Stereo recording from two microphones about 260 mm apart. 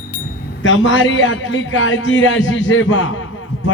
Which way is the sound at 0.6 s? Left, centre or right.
Left.